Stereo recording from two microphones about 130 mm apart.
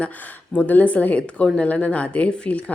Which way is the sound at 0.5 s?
10° left (ahead or behind).